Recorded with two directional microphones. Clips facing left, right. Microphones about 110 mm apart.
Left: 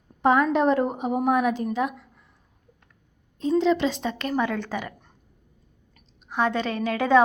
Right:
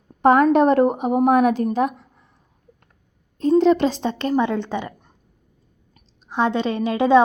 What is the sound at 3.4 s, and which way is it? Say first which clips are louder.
A woman's voice: right 6 dB; 50° right (ahead or behind).